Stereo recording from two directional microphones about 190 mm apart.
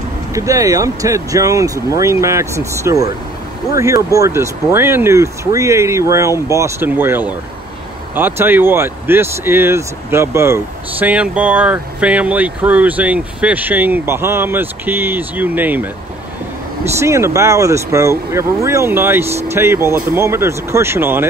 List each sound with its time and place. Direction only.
0.3 s speech: 15° right (ahead or behind)
17.0 s speech: 15° right (ahead or behind)